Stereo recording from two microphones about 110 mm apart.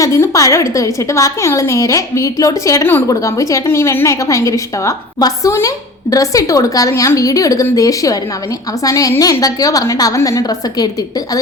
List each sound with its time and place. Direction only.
0.0 s a woman's voice: 30° left (ahead or behind)